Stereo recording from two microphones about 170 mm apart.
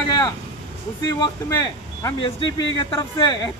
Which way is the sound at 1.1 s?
25° left (ahead or behind).